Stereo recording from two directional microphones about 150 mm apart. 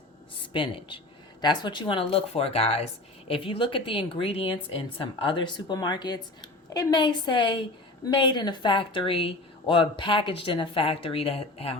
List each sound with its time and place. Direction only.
0.3 s speech: 35° left (ahead or behind)